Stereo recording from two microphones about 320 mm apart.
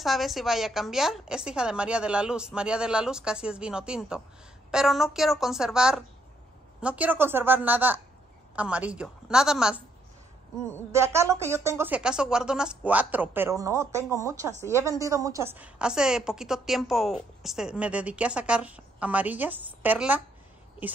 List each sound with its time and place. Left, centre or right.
0.0 s a woman's voice: centre
10.9 s a woman's voice: centre